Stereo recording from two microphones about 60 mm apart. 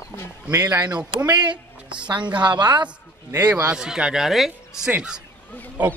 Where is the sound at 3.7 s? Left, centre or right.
Centre.